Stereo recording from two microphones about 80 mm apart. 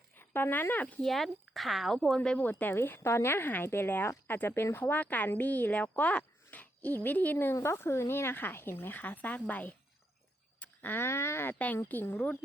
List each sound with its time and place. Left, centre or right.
0.2 s speech: left
1.0 s speech: centre
2.4 s a woman's voice: left
7.5 s a woman's voice: left
11.5 s a woman's voice: centre